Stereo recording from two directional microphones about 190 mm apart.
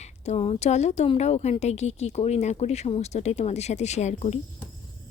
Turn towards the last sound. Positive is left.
turn(degrees=35)  # may be behind; listen again after turning